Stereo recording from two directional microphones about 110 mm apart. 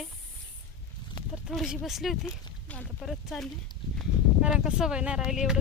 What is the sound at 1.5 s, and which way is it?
Speech, centre (ahead or behind).